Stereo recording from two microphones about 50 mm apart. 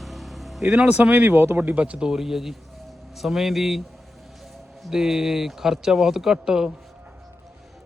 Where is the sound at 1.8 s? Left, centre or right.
Right.